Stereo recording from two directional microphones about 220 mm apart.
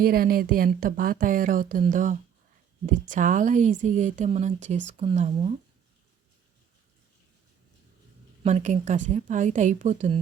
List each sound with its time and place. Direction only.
0.0 s a woman's voice: 40° right (ahead or behind)
8.4 s a woman's voice: 35° right (ahead or behind)